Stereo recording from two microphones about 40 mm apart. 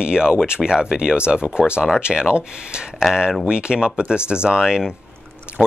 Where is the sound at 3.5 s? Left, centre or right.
Right.